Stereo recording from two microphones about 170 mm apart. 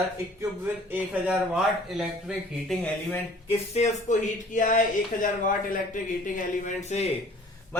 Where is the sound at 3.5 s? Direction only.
40° left (ahead or behind).